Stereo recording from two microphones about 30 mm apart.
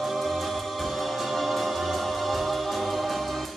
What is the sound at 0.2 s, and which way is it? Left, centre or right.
Music, centre.